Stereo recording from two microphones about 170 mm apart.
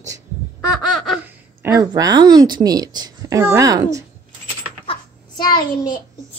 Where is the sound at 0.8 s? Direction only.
Centre (ahead or behind).